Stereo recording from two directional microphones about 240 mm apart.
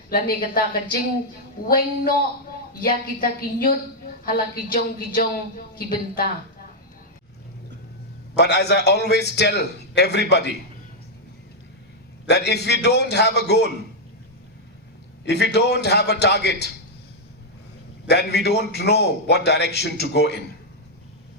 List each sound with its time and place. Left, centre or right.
0.1 s a man's voice: left
8.4 s a man's voice: left
12.3 s a man's voice: left
15.2 s a man's voice: left
18.1 s a man's voice: left